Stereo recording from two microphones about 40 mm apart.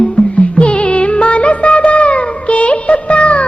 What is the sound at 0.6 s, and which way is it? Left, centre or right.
Music of bollywood, left.